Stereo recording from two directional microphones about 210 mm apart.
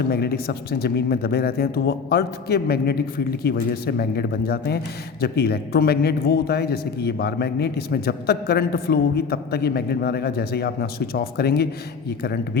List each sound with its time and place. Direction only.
0.1 s a man's voice: 50° left (ahead or behind)